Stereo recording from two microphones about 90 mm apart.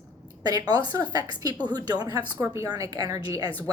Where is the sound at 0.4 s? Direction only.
45° right (ahead or behind).